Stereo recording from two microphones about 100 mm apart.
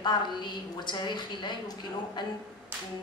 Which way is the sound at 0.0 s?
50° left (ahead or behind).